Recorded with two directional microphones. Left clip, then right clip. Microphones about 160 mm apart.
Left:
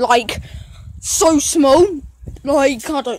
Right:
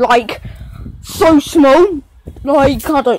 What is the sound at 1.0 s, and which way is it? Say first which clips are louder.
Speech: right 4 dB; 15° left (ahead or behind).